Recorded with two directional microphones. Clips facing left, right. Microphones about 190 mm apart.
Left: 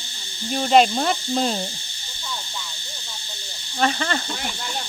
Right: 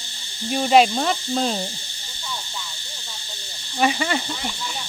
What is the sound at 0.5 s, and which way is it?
Speech, 5° right (ahead or behind).